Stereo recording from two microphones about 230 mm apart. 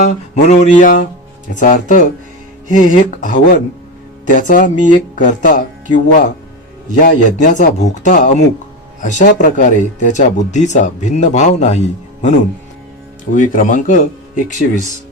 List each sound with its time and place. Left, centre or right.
0.4 s speech: left